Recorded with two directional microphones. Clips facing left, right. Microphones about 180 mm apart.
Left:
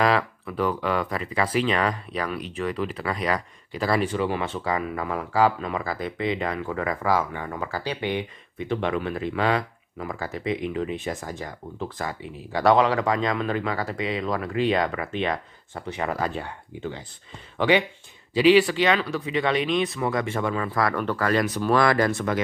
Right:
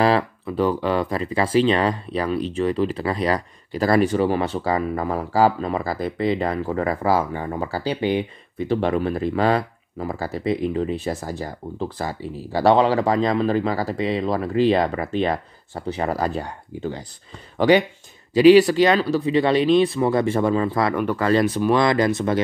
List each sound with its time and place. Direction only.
0.0 s speech: 30° right (ahead or behind)
20.9 s speech: 10° right (ahead or behind)
21.2 s speech: 30° right (ahead or behind)